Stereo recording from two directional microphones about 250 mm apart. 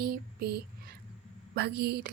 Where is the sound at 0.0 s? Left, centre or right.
Right.